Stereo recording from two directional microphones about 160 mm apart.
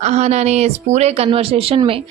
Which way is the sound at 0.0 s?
45° right (ahead or behind).